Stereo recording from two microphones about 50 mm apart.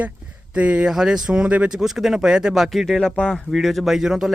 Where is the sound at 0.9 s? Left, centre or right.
Centre.